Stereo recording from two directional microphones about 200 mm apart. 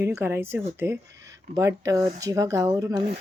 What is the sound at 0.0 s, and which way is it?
A child's voice, 10° right (ahead or behind).